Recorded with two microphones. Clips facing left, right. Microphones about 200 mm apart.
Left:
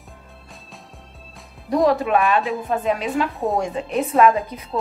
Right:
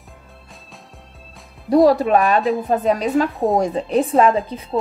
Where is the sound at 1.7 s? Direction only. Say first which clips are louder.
Right 5 dB; 35° right (ahead or behind).